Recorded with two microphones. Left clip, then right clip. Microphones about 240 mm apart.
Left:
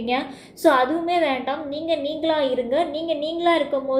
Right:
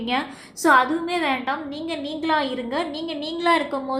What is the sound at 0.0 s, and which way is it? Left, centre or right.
A woman's voice, right.